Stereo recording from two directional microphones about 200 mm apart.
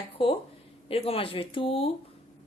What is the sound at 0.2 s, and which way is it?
A woman's voice, 25° left (ahead or behind).